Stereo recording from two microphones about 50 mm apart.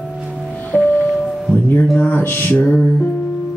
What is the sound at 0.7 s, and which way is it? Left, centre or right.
Music, right.